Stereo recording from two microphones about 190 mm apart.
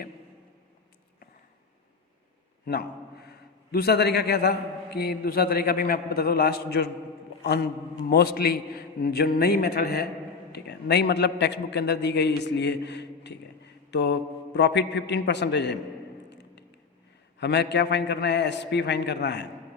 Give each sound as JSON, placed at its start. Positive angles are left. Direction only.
{"t": 2.6, "sound": "a man's voice", "side_deg": 55}
{"t": 7.4, "sound": "mantra", "side_deg": 60}
{"t": 8.1, "sound": "a man's voice", "side_deg": 55}
{"t": 16.3, "sound": "a sound", "side_deg": 65}
{"t": 17.4, "sound": "a man's voice", "side_deg": 65}